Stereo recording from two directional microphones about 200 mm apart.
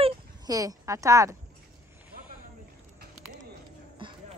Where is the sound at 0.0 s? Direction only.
20° right (ahead or behind).